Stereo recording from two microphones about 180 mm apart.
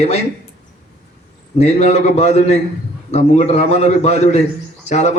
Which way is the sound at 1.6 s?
35° left (ahead or behind).